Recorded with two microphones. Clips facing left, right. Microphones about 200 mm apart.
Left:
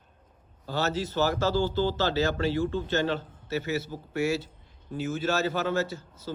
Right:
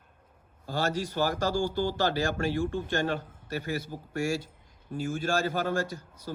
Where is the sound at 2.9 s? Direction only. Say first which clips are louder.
Left 2 dB; 45° right (ahead or behind).